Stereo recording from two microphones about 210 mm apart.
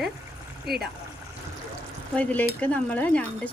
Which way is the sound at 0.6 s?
50° right (ahead or behind).